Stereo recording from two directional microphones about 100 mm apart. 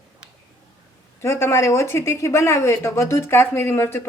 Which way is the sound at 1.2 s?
25° left (ahead or behind).